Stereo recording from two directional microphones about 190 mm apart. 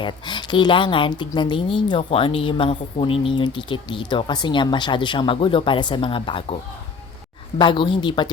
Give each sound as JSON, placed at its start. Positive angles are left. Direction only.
{"t": 0.0, "sound": "a woman's voice", "side_deg": 25}
{"t": 7.6, "sound": "a woman's voice", "side_deg": 25}